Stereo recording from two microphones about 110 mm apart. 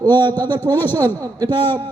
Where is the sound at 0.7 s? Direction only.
20° left (ahead or behind).